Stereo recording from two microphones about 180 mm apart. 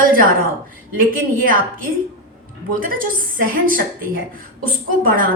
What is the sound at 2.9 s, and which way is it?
A woman's voice, 50° right (ahead or behind).